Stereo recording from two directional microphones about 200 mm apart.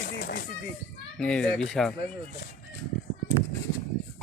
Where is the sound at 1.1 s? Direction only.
5° left (ahead or behind).